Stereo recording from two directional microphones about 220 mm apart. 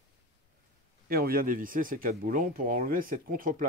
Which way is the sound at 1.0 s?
40° right (ahead or behind).